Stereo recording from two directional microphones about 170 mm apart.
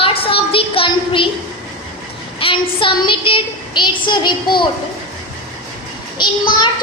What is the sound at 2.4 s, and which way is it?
A woman's voice, 30° left (ahead or behind).